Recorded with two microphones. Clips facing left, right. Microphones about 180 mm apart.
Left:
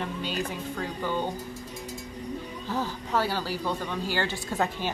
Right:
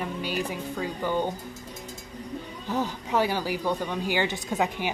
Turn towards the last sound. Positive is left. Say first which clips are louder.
# right 1 dB
turn(degrees=-15)  # may be behind; listen again after turning